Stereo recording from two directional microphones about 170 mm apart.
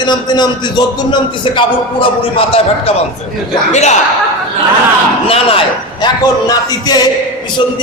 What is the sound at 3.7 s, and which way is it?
Speech, 40° left (ahead or behind).